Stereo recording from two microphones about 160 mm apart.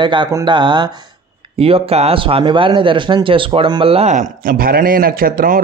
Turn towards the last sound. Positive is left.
turn(degrees=-60)  # may be behind; listen again after turning